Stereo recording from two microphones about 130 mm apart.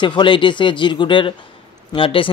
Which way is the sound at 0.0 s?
40° left (ahead or behind).